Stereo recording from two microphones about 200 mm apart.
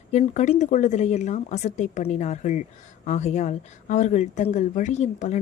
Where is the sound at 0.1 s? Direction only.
35° left (ahead or behind).